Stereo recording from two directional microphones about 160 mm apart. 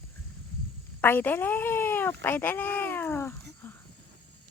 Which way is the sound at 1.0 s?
10° left (ahead or behind).